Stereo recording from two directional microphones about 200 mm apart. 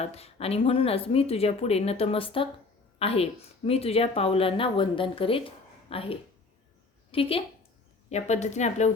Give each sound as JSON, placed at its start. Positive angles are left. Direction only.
{"t": 0.0, "sound": "a woman's voice", "side_deg": 30}